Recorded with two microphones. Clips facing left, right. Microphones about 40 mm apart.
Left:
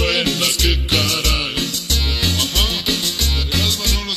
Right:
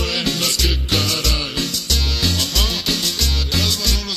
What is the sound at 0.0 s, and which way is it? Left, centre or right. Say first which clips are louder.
Music: left 3 dB; left.